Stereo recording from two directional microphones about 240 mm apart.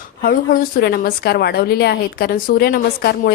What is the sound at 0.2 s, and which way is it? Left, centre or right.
A woman's voice, left.